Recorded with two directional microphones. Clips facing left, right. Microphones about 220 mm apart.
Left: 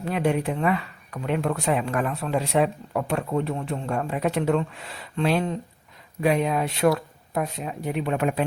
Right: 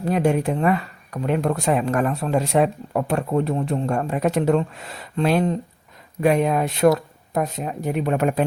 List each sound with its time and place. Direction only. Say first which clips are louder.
0.0 s speech: right 4 dB; 40° right (ahead or behind)